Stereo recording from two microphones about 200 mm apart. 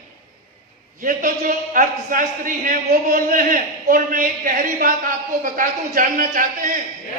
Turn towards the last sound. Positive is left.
turn(degrees=-45)  # may be behind; listen again after turning